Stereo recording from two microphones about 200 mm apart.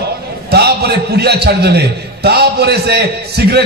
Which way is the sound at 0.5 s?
55° right (ahead or behind).